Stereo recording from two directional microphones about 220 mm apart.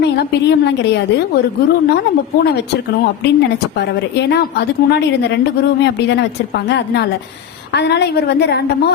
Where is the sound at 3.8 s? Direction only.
50° left (ahead or behind).